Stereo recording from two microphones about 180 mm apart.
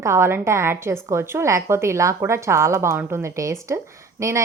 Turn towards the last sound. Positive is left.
turn(degrees=-15)  # may be behind; listen again after turning